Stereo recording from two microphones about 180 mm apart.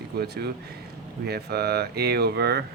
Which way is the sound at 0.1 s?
65° right (ahead or behind).